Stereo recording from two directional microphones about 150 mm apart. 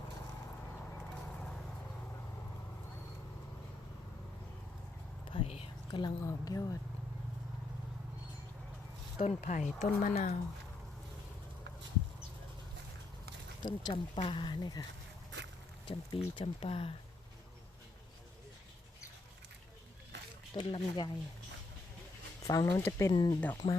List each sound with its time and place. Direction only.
0.4 s a sound: 15° left (ahead or behind)
5.3 s whispering: 40° left (ahead or behind)
5.9 s speech: 30° left (ahead or behind)
9.1 s speech: 50° left (ahead or behind)
13.6 s speech: 30° left (ahead or behind)
15.9 s speech: 35° left (ahead or behind)
20.6 s speech: 35° left (ahead or behind)
22.4 s speech: 20° left (ahead or behind)